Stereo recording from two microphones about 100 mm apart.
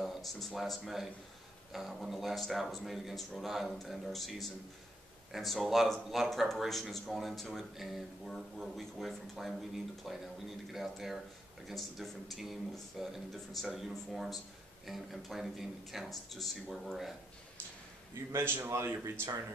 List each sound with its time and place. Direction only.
0.0 s speech: centre (ahead or behind)
18.3 s speech: 25° right (ahead or behind)